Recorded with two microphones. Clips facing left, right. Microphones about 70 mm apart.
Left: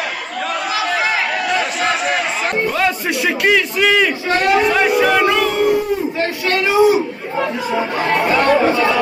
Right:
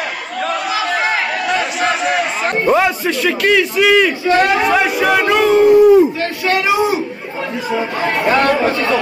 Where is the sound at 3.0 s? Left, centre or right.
Centre.